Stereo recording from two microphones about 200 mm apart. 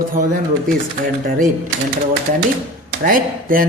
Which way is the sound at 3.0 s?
45° right (ahead or behind).